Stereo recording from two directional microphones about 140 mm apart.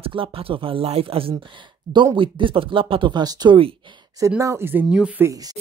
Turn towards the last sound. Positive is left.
turn(degrees=-25)  # may be behind; listen again after turning